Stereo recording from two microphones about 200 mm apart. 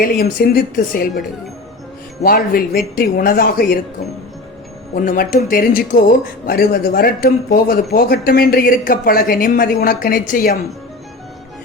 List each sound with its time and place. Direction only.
0.0 s speech: 50° left (ahead or behind)
2.2 s speech: 50° left (ahead or behind)
4.9 s speech: 45° left (ahead or behind)